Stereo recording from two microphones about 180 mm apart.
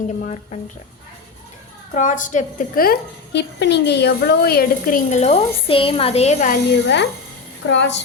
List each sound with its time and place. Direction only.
1.9 s a woman's voice: 45° left (ahead or behind)
6.5 s a woman's voice: 65° left (ahead or behind)
7.7 s a woman's voice: 80° left